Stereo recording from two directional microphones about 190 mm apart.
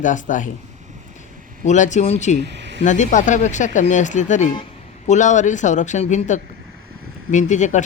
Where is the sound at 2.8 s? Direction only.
40° left (ahead or behind).